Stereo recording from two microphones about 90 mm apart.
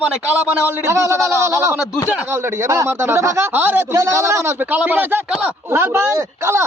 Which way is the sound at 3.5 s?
20° right (ahead or behind).